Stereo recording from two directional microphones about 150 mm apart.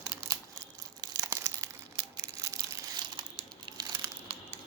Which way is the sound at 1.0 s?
25° right (ahead or behind).